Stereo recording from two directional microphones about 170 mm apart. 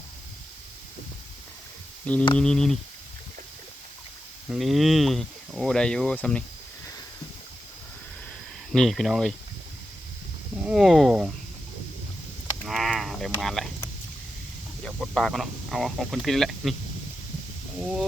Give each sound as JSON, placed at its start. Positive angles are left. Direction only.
{"t": 2.1, "sound": "speech", "side_deg": 10}
{"t": 4.4, "sound": "speech", "side_deg": 0}
{"t": 8.7, "sound": "speech", "side_deg": 0}
{"t": 10.6, "sound": "speech", "side_deg": -5}
{"t": 12.6, "sound": "a sound", "side_deg": 0}
{"t": 14.8, "sound": "speech", "side_deg": 0}
{"t": 17.7, "sound": "speech", "side_deg": -5}